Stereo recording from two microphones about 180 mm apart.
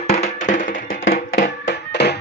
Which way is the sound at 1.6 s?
70° left (ahead or behind).